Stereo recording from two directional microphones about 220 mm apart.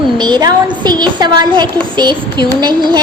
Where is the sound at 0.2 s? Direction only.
20° right (ahead or behind).